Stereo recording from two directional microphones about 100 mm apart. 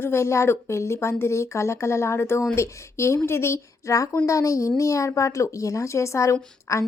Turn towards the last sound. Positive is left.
turn(degrees=30)  # may be behind; listen again after turning